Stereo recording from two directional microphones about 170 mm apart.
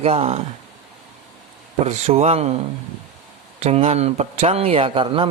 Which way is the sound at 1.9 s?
40° right (ahead or behind).